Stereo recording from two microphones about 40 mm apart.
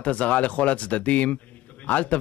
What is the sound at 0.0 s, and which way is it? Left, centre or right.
A man's voice, left.